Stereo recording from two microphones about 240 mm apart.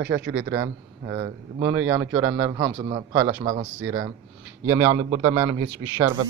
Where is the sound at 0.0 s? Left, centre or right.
Right.